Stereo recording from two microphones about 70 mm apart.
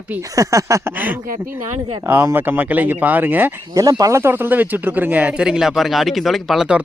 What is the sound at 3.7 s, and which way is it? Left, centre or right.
Speech, right.